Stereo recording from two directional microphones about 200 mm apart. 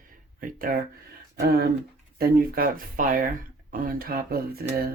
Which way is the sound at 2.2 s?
45° right (ahead or behind).